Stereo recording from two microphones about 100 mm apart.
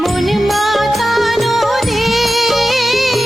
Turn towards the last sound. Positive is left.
turn(degrees=0)  # may be behind; listen again after turning